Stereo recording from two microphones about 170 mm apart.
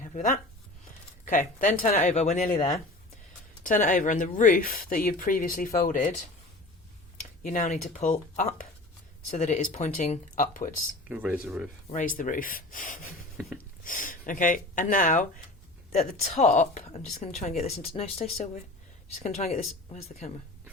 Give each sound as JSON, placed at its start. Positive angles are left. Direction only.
{"t": 0.0, "sound": "a sound", "side_deg": 50}
{"t": 1.2, "sound": "speech", "side_deg": 50}
{"t": 7.4, "sound": "speech", "side_deg": 50}
{"t": 11.1, "sound": "speech", "side_deg": -10}
{"t": 11.9, "sound": "speech", "side_deg": 50}